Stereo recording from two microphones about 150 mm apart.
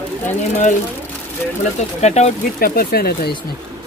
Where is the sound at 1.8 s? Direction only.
50° left (ahead or behind).